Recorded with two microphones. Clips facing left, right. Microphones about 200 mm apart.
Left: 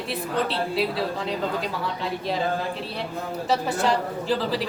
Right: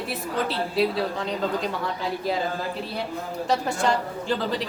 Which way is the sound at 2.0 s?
Centre (ahead or behind).